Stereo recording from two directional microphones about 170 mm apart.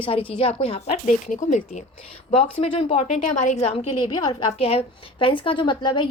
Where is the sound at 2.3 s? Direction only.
35° left (ahead or behind).